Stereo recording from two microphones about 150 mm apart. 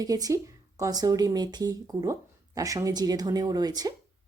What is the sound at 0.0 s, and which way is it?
Speech, 25° right (ahead or behind).